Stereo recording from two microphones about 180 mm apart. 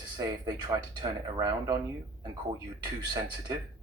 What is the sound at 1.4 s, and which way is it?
Speech, 20° right (ahead or behind).